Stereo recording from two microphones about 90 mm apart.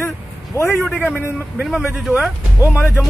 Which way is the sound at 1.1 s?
15° right (ahead or behind).